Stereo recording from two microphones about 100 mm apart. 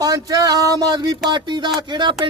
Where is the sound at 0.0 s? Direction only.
40° right (ahead or behind).